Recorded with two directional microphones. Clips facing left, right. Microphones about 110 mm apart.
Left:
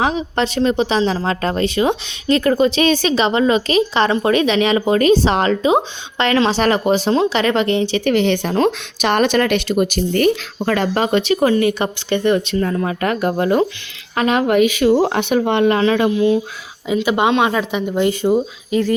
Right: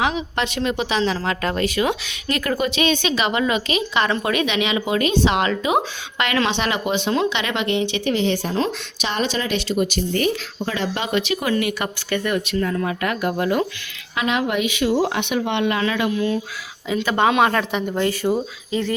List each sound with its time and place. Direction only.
0.0 s speech: 35° left (ahead or behind)
8.0 s speech: 65° left (ahead or behind); by 13.7 s 35° left (ahead or behind)
14.2 s a woman's voice: 45° left (ahead or behind); by 18.0 s 5° left (ahead or behind)
18.0 s speech: 20° left (ahead or behind)